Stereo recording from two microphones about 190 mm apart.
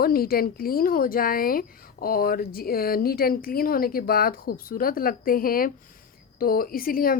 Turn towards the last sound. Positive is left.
turn(degrees=50)  # may be behind; listen again after turning